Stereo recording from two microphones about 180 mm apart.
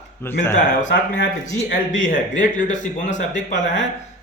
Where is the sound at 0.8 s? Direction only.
90° left.